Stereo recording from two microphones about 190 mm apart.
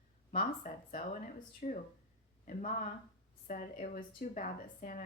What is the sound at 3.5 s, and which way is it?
A woman's voice, 45° left (ahead or behind).